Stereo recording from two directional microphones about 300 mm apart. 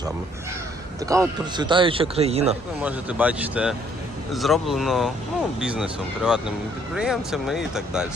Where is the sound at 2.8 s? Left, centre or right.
Centre.